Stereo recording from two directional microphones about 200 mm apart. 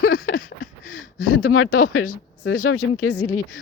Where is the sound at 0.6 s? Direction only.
90° left.